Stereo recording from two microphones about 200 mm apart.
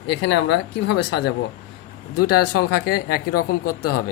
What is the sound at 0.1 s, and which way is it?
Speech, 60° left (ahead or behind).